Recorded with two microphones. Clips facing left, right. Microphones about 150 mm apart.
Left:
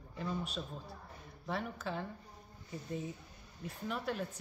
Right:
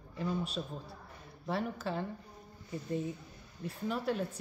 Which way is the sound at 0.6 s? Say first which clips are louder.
Right 3 dB; 15° right (ahead or behind).